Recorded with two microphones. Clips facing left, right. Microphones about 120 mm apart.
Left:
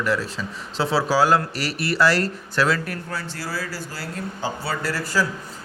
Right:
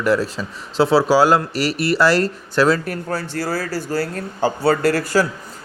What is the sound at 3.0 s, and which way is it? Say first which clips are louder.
Speech: right 8 dB; 50° right (ahead or behind).